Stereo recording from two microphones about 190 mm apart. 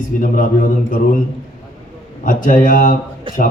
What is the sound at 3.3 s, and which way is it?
Speech, 25° right (ahead or behind).